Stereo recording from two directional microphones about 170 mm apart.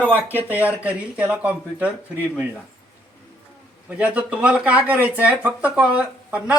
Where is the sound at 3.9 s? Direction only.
10° right (ahead or behind).